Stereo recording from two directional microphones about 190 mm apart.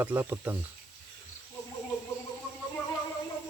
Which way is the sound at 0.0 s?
10° right (ahead or behind).